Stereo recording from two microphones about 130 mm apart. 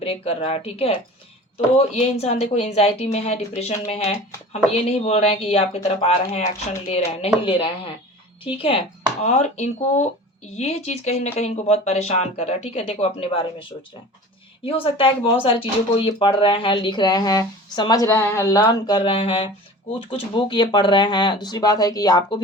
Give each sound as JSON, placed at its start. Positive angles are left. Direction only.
{"t": 0.0, "sound": "a woman's voice", "side_deg": 50}
{"t": 9.2, "sound": "speech", "side_deg": 60}